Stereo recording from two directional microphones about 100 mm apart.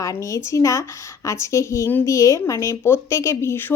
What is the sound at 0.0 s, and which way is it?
A woman's voice, 30° left (ahead or behind).